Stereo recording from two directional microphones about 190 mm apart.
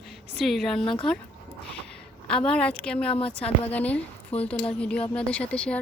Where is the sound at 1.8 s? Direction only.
5° left (ahead or behind).